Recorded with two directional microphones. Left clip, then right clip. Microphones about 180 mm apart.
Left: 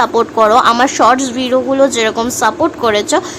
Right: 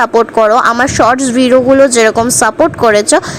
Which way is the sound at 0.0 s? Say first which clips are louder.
Right 2 dB; 30° right (ahead or behind).